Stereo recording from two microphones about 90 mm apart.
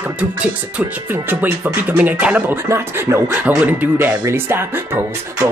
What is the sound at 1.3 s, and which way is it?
Music, 20° right (ahead or behind).